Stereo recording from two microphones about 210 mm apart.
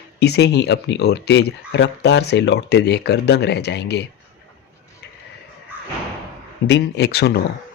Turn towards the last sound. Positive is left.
turn(degrees=50)  # may be behind; listen again after turning